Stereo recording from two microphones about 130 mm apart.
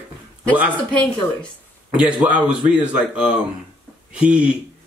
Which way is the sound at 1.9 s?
10° right (ahead or behind).